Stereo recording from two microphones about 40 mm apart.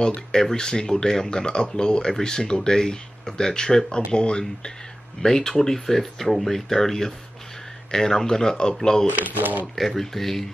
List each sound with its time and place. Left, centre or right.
0.0 s speech: centre
9.1 s speech: right
9.8 s speech: centre